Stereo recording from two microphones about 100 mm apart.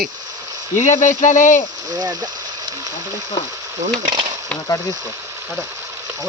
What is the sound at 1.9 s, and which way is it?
Speech, 45° right (ahead or behind).